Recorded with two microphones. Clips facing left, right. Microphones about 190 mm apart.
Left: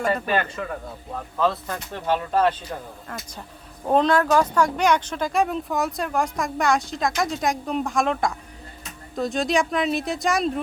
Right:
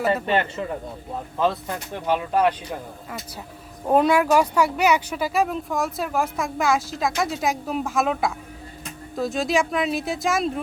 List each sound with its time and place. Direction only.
0.1 s a man's voice: 25° right (ahead or behind)
3.8 s speech: 10° right (ahead or behind)